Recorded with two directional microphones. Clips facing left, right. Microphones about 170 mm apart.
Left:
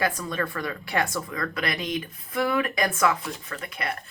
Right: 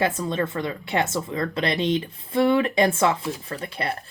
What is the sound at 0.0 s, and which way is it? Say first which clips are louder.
Speech: right 4 dB; 25° right (ahead or behind).